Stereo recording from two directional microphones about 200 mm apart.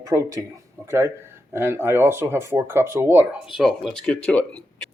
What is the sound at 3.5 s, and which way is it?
Speech, centre (ahead or behind).